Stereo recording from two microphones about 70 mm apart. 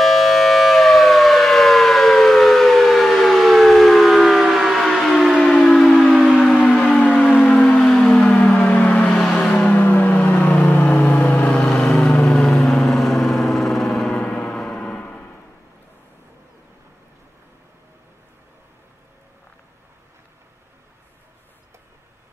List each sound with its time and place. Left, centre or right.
0.0 s civil defense siren: centre
5.3 s siren: centre
6.1 s civil defense siren: centre
6.8 s civil defense siren: centre
7.4 s a sound: centre
8.3 s music: left
9.6 s music: left
11.6 s vehicle: centre